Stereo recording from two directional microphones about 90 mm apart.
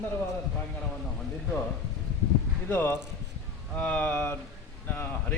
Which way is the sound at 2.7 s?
20° left (ahead or behind).